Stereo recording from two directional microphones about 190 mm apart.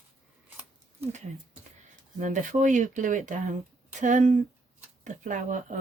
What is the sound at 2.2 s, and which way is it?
Speech, 40° right (ahead or behind).